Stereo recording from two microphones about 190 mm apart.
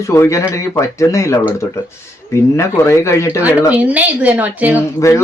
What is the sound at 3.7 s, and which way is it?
A woman's voice, 5° right (ahead or behind).